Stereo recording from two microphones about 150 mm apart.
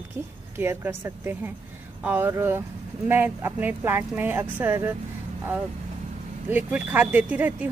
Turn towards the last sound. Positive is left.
turn(degrees=-10)  # may be behind; listen again after turning